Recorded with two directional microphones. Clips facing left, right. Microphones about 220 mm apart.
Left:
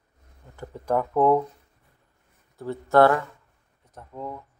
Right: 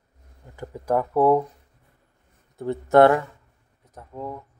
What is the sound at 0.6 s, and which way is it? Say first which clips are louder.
Speech: right 2 dB; 10° right (ahead or behind).